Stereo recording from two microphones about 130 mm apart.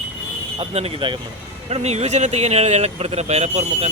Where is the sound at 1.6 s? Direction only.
55° right (ahead or behind).